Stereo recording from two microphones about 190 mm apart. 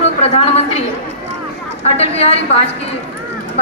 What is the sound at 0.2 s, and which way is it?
A woman's voice, 35° left (ahead or behind).